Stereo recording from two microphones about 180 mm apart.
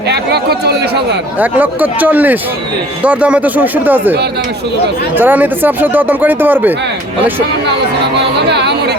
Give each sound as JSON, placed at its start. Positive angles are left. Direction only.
{"t": 0.1, "sound": "a sound", "side_deg": -65}
{"t": 1.4, "sound": "speech", "side_deg": -10}
{"t": 8.4, "sound": "chatter", "side_deg": -65}